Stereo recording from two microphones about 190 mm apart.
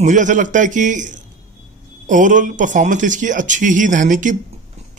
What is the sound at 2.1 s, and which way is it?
Speech, 40° right (ahead or behind).